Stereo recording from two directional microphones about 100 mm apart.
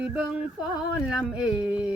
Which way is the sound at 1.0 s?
10° right (ahead or behind).